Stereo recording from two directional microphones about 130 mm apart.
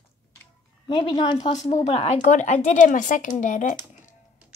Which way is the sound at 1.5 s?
60° left (ahead or behind).